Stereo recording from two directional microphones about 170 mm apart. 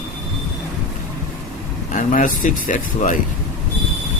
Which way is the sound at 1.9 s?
50° left (ahead or behind).